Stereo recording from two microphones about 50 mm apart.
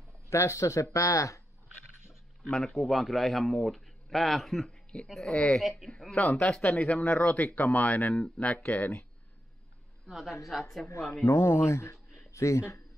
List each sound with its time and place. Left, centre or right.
0.3 s speech: left
2.5 s a man's voice: centre
4.6 s a sound: centre
5.2 s speech: centre
5.6 s a man's voice: centre
5.9 s speech: centre
6.8 s speech: left
10.0 s a woman's voice: centre
11.3 s speech: left